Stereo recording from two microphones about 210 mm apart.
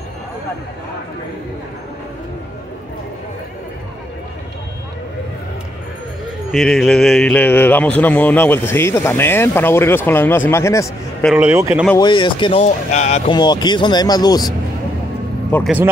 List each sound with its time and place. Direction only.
6.5 s speech: centre (ahead or behind)
11.3 s speech: 10° right (ahead or behind)
12.0 s speech: 20° left (ahead or behind)
13.3 s speech: 20° left (ahead or behind)
15.5 s speech: 10° left (ahead or behind)